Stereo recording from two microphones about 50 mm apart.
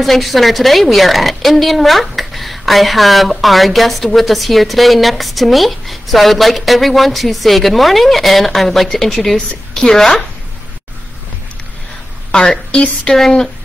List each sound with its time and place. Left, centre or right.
0.0 s a woman's voice: centre
12.3 s a woman's voice: centre